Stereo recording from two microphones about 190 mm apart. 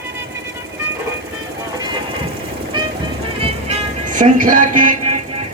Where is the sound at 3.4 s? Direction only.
30° right (ahead or behind).